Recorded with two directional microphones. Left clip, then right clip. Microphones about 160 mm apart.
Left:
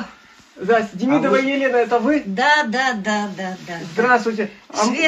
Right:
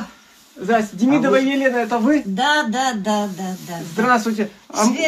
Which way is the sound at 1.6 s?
15° right (ahead or behind).